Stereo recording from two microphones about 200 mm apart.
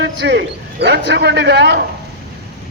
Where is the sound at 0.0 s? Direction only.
60° right (ahead or behind).